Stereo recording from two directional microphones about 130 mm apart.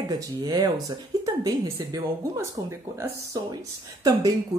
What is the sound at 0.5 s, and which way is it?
Speech, 30° right (ahead or behind).